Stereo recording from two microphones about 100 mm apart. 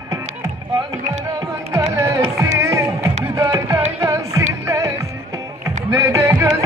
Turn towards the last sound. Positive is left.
turn(degrees=-30)  # may be behind; listen again after turning